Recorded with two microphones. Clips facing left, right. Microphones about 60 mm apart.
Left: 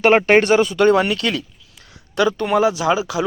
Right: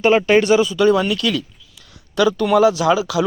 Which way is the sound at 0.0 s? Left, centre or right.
Left.